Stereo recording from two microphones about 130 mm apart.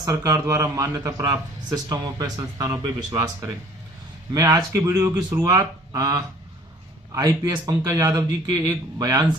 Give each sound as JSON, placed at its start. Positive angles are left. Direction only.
{"t": 0.0, "sound": "speech", "side_deg": -25}